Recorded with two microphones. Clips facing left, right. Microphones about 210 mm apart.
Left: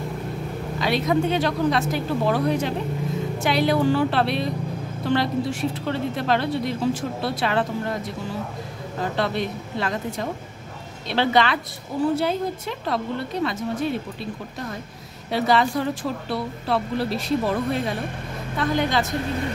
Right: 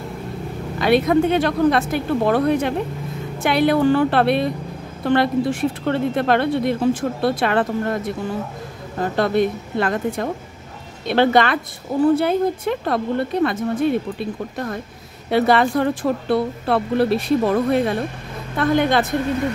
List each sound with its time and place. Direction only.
0.7 s a woman's voice: 55° right (ahead or behind)
9.1 s a woman's voice: 50° right (ahead or behind)
15.2 s a woman's voice: 55° right (ahead or behind)